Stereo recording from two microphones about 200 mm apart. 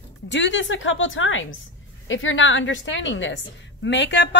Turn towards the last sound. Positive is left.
turn(degrees=60)  # may be behind; listen again after turning